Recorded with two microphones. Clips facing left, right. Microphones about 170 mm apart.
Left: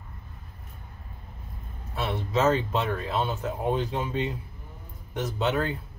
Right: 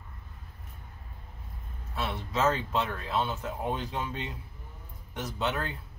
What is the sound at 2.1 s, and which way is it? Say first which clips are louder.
Speech: left 5 dB; 25° left (ahead or behind).